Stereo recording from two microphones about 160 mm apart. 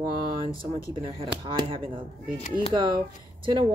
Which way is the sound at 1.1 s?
35° right (ahead or behind).